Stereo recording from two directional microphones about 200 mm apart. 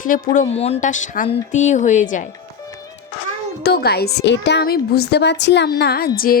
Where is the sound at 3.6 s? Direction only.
55° left (ahead or behind).